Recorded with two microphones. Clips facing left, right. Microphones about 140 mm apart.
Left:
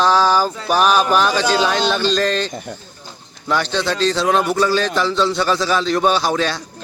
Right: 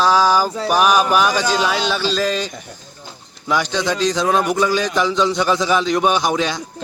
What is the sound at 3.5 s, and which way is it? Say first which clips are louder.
A man's voice: even; 10° right (ahead or behind).